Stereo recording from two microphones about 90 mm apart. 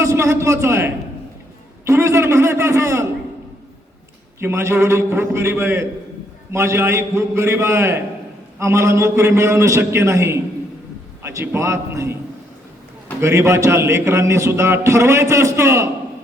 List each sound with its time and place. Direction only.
0.0 s a man's voice: 30° right (ahead or behind)
1.8 s a sound: 30° right (ahead or behind)
4.4 s a man's voice: 30° right (ahead or behind)
13.2 s a man's voice: 30° right (ahead or behind)